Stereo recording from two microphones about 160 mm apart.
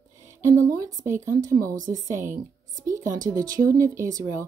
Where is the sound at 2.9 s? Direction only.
20° right (ahead or behind).